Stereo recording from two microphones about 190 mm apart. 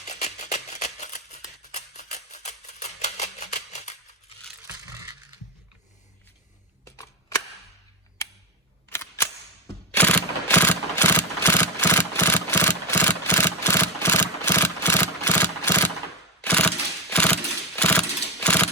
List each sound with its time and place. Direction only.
0.0 s music: 35° left (ahead or behind)
6.8 s a sound: 15° left (ahead or behind)
16.4 s mechanisms: 5° left (ahead or behind)